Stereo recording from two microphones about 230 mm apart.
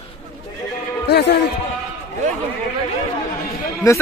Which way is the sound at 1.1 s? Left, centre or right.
Left.